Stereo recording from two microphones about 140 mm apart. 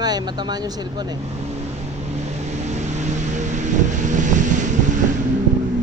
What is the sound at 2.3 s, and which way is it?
Vehicle, 55° right (ahead or behind).